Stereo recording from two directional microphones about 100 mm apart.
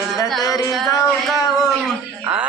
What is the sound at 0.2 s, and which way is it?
Music, 35° left (ahead or behind).